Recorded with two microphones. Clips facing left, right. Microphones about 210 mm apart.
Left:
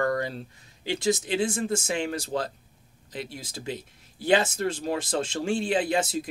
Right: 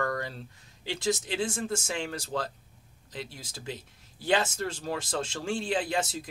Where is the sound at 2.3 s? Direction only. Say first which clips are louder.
Left 3 dB; 30° left (ahead or behind).